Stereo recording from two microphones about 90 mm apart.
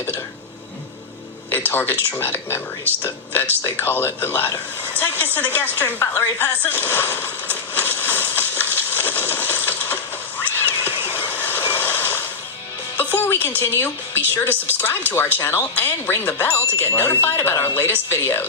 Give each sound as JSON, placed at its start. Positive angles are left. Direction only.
{"t": 1.5, "sound": "speech", "side_deg": 20}
{"t": 2.9, "sound": "speech", "side_deg": -25}
{"t": 3.8, "sound": "speech", "side_deg": 25}
{"t": 4.9, "sound": "a sound", "side_deg": 25}
{"t": 10.9, "sound": "vehicle", "side_deg": -25}
{"t": 11.3, "sound": "vehicle", "side_deg": 25}
{"t": 13.0, "sound": "music", "side_deg": 25}
{"t": 13.6, "sound": "speech", "side_deg": 25}